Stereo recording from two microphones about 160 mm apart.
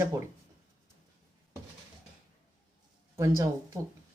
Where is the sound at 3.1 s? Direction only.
20° right (ahead or behind).